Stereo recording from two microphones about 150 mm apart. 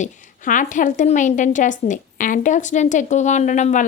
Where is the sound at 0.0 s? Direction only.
60° left (ahead or behind).